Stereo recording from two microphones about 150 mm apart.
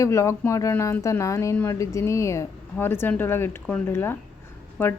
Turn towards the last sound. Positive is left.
turn(degrees=15)  # may be behind; listen again after turning